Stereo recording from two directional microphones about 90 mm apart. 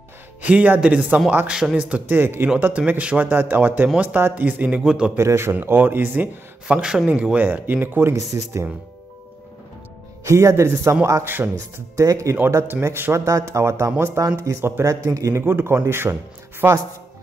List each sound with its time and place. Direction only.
0.4 s speech: 15° right (ahead or behind)
5.1 s speech: 30° right (ahead or behind)
6.8 s speech: 10° right (ahead or behind); by 8.6 s 30° right (ahead or behind)
10.2 s speech: 35° right (ahead or behind)
11.2 s speech: 20° right (ahead or behind)
12.0 s speech: 35° right (ahead or behind)
13.2 s speech: 40° right (ahead or behind)